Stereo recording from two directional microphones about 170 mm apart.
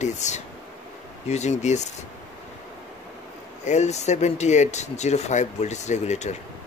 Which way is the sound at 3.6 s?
40° left (ahead or behind).